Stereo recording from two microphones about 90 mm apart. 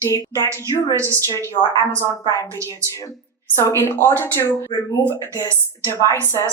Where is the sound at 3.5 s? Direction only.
30° left (ahead or behind).